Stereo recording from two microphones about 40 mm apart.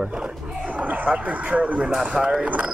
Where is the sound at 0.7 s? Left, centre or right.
Right.